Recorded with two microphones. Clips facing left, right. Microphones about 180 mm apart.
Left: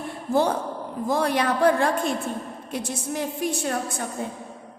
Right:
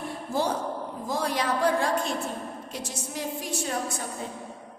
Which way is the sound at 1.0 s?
60° left (ahead or behind).